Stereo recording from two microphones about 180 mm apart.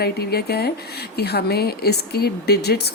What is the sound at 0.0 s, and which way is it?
A woman's voice, 60° left (ahead or behind).